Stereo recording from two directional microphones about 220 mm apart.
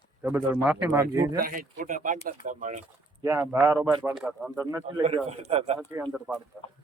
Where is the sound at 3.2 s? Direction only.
15° right (ahead or behind).